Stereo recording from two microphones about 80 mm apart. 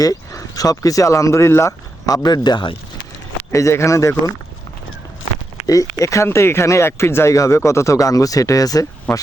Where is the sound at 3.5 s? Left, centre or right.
Left.